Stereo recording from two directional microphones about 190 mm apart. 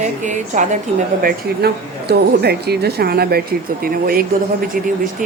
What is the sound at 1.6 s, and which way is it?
A woman's voice, 55° right (ahead or behind).